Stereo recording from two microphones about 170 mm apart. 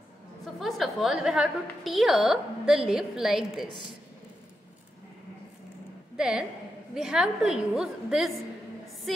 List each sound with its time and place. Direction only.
0.6 s a woman's voice: centre (ahead or behind)
6.1 s a woman's voice: 5° right (ahead or behind)